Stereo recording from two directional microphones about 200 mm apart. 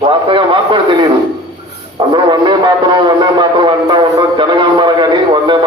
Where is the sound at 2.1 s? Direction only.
25° right (ahead or behind).